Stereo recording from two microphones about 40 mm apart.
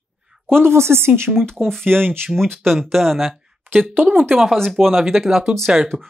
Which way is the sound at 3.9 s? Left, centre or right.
Right.